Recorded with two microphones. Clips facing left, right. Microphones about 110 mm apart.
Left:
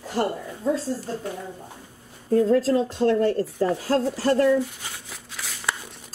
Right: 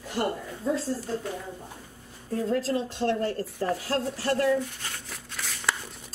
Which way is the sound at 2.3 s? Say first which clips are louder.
Left 8 dB; 40° left (ahead or behind).